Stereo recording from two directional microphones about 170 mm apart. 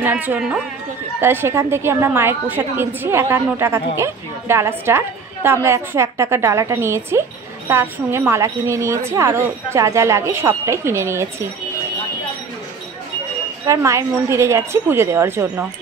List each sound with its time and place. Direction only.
0.0 s a woman's voice: 10° right (ahead or behind)
13.7 s a woman's voice: 15° right (ahead or behind)